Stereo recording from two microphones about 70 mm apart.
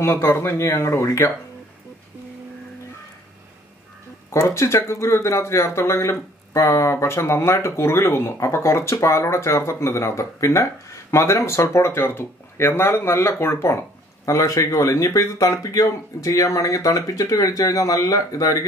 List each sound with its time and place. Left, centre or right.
0.0 s speech: left
4.3 s speech: left
14.2 s speech: left